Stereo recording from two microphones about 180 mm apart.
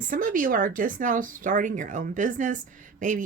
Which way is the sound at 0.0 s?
50° right (ahead or behind).